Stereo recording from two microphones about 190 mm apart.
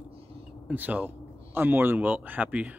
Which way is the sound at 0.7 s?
10° right (ahead or behind).